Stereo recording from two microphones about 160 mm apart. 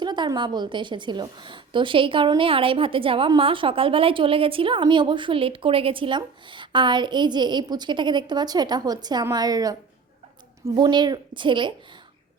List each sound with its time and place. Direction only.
0.0 s a woman's voice: 25° right (ahead or behind)
10.8 s a woman's voice: 25° right (ahead or behind)